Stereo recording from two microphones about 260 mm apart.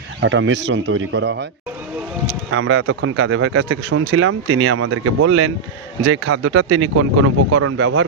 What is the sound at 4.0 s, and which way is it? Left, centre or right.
Speech, right.